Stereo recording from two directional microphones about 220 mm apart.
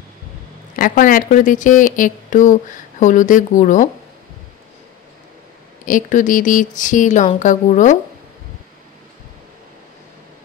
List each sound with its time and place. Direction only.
0.7 s a woman's voice: 40° left (ahead or behind)
5.9 s a woman's voice: 35° left (ahead or behind)